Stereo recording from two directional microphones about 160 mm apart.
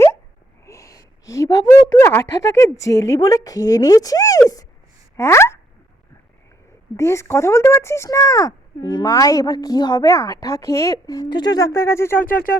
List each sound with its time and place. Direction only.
0.6 s a sound: 20° left (ahead or behind)
2.3 s speech: 20° left (ahead or behind)
5.1 s plop: 15° left (ahead or behind)
6.9 s speech: 20° left (ahead or behind)